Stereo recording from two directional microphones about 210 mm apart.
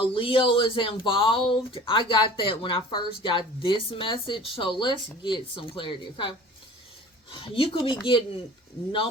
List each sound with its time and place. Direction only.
0.0 s speech: 25° left (ahead or behind)
7.3 s speech: 25° left (ahead or behind)